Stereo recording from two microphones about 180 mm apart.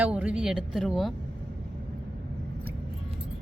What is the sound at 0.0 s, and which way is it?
Speech, 5° right (ahead or behind).